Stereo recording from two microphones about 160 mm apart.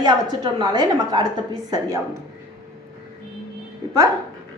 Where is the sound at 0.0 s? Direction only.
25° right (ahead or behind).